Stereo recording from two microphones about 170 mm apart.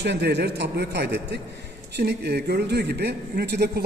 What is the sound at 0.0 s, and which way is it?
A man's voice, 85° right.